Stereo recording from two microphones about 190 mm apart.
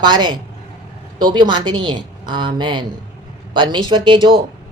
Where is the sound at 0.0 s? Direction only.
25° right (ahead or behind).